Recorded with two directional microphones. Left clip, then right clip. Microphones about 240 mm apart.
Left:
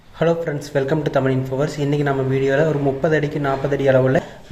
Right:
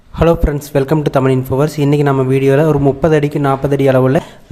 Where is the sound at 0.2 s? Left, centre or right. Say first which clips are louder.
Right 6 dB; right.